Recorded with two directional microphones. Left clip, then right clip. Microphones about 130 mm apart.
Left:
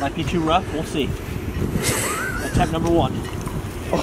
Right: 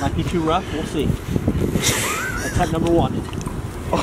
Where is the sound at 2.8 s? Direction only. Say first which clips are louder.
Right 1 dB; centre (ahead or behind).